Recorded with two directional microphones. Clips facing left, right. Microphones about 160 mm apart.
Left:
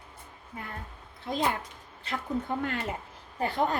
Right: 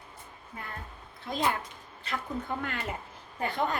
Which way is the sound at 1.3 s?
25° left (ahead or behind).